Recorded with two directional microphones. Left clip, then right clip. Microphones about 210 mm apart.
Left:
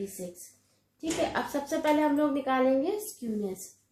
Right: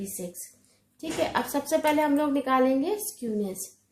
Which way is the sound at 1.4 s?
50° right (ahead or behind).